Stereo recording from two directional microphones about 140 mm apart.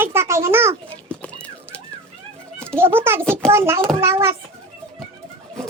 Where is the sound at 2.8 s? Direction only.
15° right (ahead or behind).